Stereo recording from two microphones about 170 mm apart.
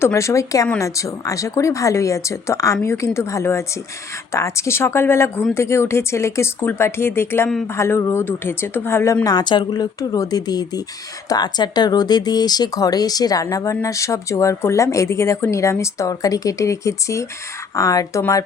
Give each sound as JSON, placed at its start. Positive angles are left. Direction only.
{"t": 0.0, "sound": "speech", "side_deg": 15}